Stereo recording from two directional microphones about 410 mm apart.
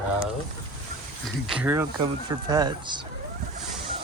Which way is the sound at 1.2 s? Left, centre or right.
Centre.